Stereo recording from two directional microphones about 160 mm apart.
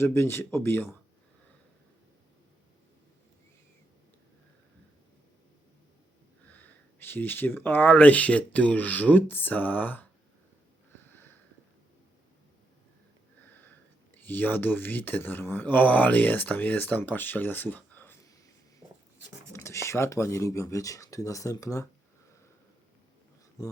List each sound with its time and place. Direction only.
0.0 s speech: 15° left (ahead or behind)
6.5 s speech: 10° left (ahead or behind)
11.1 s a sound: 15° left (ahead or behind)
14.2 s speech: 10° left (ahead or behind)
19.5 s speech: 20° left (ahead or behind)